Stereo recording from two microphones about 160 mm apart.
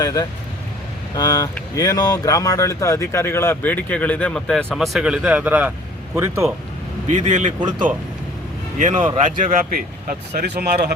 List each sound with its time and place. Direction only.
0.0 s speech: 20° left (ahead or behind); by 6.5 s 15° right (ahead or behind)
7.1 s a man's voice: 45° right (ahead or behind)
8.8 s a man's voice: 55° right (ahead or behind); by 10.9 s 70° right (ahead or behind)